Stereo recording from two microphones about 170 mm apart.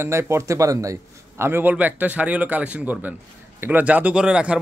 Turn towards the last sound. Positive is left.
turn(degrees=-5)  # may be behind; listen again after turning